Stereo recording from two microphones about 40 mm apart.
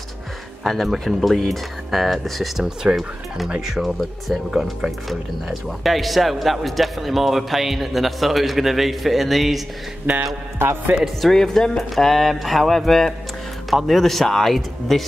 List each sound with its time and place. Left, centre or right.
0.7 s speech: centre
2.6 s speech: centre
3.6 s speech: centre
10.1 s speech: right
11.1 s mantra: centre
13.7 s speech: centre